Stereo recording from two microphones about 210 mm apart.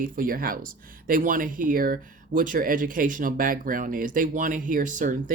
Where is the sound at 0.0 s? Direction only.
40° right (ahead or behind).